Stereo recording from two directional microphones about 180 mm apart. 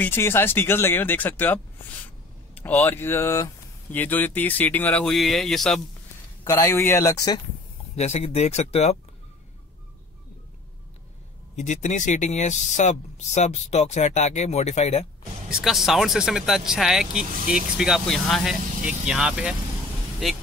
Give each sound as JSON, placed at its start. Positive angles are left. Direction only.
{"t": 0.0, "sound": "speech", "side_deg": 10}
{"t": 6.4, "sound": "speech", "side_deg": 20}
{"t": 7.9, "sound": "speech", "side_deg": 35}
{"t": 11.5, "sound": "speech", "side_deg": 40}
{"t": 15.5, "sound": "speech", "side_deg": 0}